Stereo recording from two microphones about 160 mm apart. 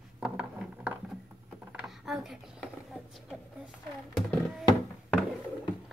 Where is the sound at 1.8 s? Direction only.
5° right (ahead or behind).